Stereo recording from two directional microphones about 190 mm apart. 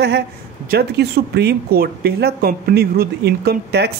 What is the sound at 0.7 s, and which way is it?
Speech, 55° right (ahead or behind).